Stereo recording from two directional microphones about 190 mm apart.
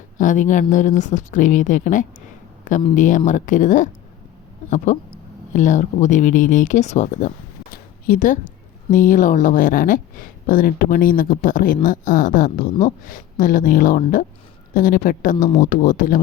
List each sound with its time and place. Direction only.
0.2 s speech: 40° left (ahead or behind)
4.9 s speech: 40° left (ahead or behind)
7.7 s a sound: 45° left (ahead or behind)
8.9 s speech: 45° left (ahead or behind)